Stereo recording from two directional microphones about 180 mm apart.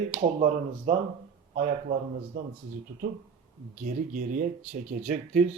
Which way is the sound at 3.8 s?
45° right (ahead or behind).